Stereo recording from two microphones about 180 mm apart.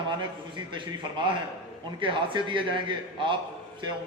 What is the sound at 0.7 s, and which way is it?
A man's voice, 25° right (ahead or behind).